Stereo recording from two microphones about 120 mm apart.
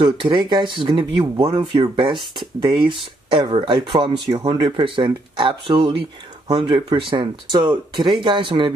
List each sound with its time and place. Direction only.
0.0 s speech: 45° right (ahead or behind)